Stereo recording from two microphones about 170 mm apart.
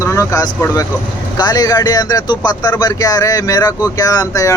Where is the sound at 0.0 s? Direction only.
20° left (ahead or behind).